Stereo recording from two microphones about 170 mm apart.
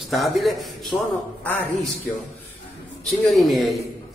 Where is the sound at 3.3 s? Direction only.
Centre (ahead or behind).